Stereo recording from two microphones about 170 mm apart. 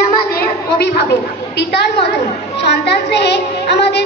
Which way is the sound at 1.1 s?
80° left.